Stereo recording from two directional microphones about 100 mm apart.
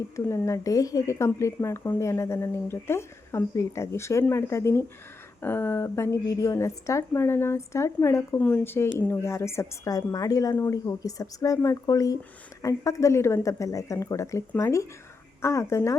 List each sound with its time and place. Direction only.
0.3 s speech: 30° left (ahead or behind)